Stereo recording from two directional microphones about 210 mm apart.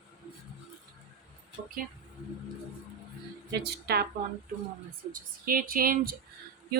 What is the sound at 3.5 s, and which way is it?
Speech, 50° right (ahead or behind).